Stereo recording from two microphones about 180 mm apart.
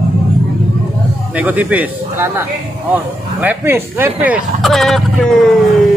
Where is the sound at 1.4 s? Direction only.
10° right (ahead or behind).